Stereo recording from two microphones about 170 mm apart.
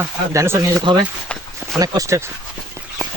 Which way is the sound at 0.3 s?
15° right (ahead or behind).